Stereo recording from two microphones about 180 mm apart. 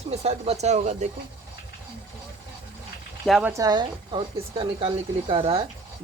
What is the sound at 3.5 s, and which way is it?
Speech, 20° right (ahead or behind).